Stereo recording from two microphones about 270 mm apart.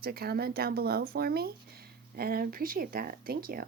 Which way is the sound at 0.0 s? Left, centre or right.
Right.